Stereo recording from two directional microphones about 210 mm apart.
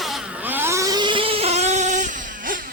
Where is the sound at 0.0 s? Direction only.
5° right (ahead or behind); by 2.6 s 40° right (ahead or behind).